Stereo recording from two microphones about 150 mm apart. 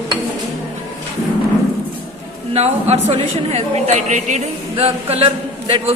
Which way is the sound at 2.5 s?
45° right (ahead or behind).